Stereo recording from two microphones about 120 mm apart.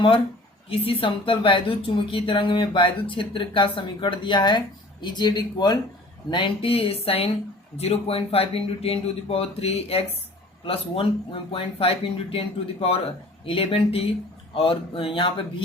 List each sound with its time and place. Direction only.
0.7 s speech: 50° left (ahead or behind)
6.3 s speech: 45° left (ahead or behind)